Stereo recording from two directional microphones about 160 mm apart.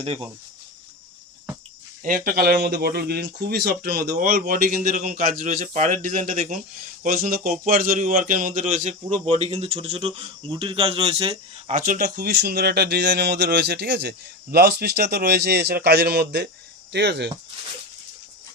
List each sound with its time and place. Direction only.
2.0 s speech: 60° right (ahead or behind); by 3.7 s 90° right
3.8 s speech: 70° right (ahead or behind)
4.3 s a man's voice: 60° right (ahead or behind)
7.0 s a man's voice: 65° right (ahead or behind); by 11.3 s 35° right (ahead or behind)
11.7 s speech: 55° right (ahead or behind); by 17.2 s 90° right